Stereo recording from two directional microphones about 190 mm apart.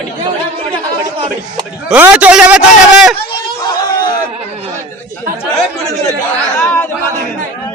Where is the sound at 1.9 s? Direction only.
5° right (ahead or behind).